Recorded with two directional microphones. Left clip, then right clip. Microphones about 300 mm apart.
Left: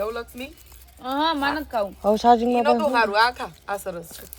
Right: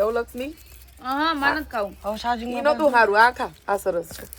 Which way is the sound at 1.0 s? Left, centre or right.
Left.